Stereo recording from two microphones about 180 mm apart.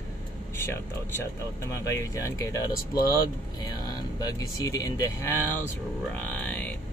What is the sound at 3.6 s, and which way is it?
Speech, 20° left (ahead or behind).